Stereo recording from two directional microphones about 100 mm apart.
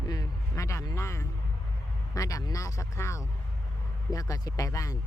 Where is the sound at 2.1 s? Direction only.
35° left (ahead or behind).